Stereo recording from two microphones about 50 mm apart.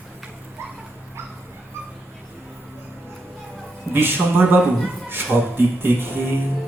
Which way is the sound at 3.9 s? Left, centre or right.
Right.